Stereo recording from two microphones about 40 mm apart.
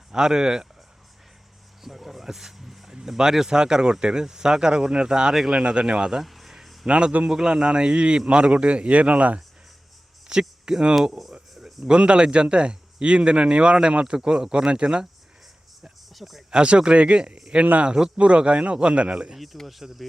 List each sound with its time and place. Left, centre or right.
0.1 s speech: centre
1.8 s a man's voice: centre; by 6.1 s right
6.2 s a sound: centre
6.8 s a man's voice: right
7.3 s a man's voice: centre; by 9.4 s right
10.3 s a man's voice: right
11.5 s a sound: centre
11.9 s a man's voice: right
16.1 s speech: centre
16.5 s a man's voice: right
17.8 s speech: centre
18.2 s a man's voice: right
19.6 s speech: centre